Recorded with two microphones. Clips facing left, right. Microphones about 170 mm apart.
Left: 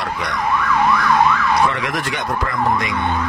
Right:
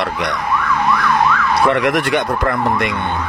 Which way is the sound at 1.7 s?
65° right (ahead or behind).